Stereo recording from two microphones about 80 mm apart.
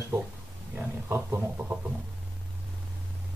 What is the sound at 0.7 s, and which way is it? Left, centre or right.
Speech, right.